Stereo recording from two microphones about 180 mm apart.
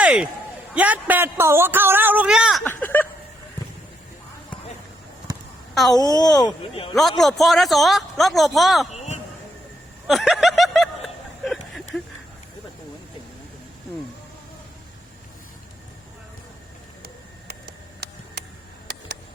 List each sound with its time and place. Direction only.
0.0 s speech: 5° right (ahead or behind)
2.6 s a sound: 10° left (ahead or behind)
5.7 s speech: centre (ahead or behind)
6.0 s speech: 20° left (ahead or behind)
6.9 s a man's voice: centre (ahead or behind)
8.9 s a man's voice: 40° left (ahead or behind)
10.1 s a man's voice: centre (ahead or behind)
11.4 s a sound: centre (ahead or behind)